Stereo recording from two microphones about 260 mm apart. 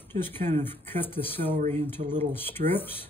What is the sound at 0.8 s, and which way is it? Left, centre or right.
Speech, centre.